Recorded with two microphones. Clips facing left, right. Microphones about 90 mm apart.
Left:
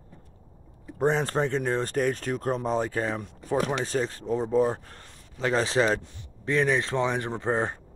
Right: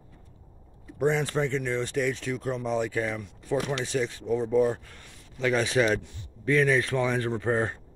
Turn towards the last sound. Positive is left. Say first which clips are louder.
# right 1 dB
turn(degrees=25)  # may be behind; listen again after turning